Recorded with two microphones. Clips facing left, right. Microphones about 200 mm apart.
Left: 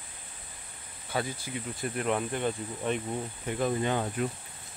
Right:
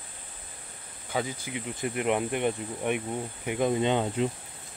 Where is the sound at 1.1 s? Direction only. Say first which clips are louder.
Right 2 dB; 15° right (ahead or behind).